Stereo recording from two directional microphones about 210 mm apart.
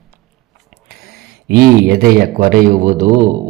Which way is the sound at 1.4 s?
50° right (ahead or behind).